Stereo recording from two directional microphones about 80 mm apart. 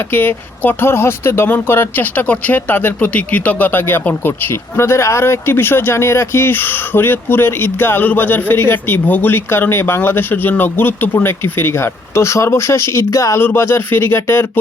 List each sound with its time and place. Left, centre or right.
0.1 s speech: left